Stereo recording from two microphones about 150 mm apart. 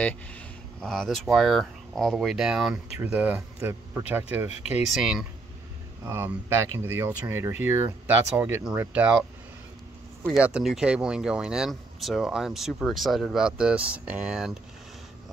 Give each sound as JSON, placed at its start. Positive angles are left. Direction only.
{"t": 0.0, "sound": "speech", "side_deg": 10}
{"t": 4.5, "sound": "speech", "side_deg": 45}
{"t": 4.8, "sound": "speech", "side_deg": -5}
{"t": 6.0, "sound": "speech", "side_deg": -15}
{"t": 10.3, "sound": "speech", "side_deg": -5}